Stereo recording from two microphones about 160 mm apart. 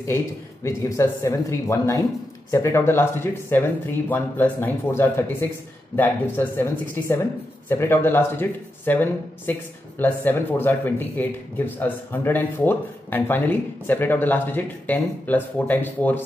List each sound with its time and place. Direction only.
0.7 s speech: 20° left (ahead or behind)